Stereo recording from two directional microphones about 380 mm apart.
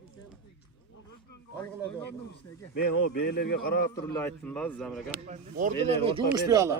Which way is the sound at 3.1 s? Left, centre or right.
Left.